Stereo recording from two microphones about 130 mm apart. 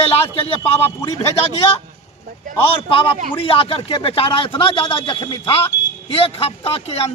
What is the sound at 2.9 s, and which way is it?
Speech, 40° left (ahead or behind).